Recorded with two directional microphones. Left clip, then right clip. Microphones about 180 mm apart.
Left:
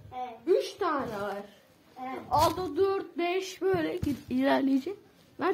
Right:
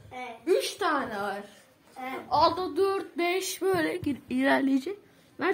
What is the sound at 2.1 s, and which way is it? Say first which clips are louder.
Female singing: right 2 dB; 35° right (ahead or behind).